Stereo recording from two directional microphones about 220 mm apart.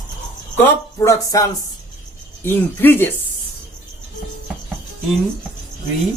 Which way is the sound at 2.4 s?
10° left (ahead or behind).